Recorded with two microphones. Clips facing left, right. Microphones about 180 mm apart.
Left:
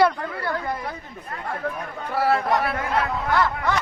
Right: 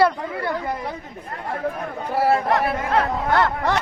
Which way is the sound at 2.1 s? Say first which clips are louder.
Right 2 dB; 20° right (ahead or behind).